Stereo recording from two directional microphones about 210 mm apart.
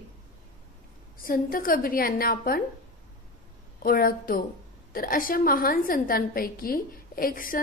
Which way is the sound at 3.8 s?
45° left (ahead or behind).